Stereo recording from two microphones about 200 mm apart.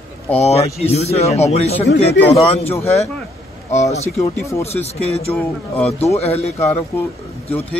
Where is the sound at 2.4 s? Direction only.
30° left (ahead or behind).